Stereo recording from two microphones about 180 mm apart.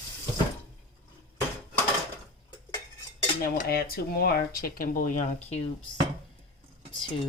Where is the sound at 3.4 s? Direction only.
55° left (ahead or behind).